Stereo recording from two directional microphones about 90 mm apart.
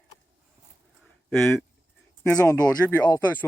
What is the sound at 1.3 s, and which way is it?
Speech, 5° left (ahead or behind).